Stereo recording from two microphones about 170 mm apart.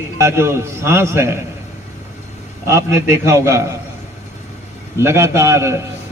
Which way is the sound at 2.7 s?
15° right (ahead or behind).